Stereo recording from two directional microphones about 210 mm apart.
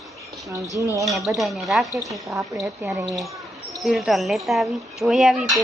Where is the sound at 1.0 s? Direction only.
Centre (ahead or behind).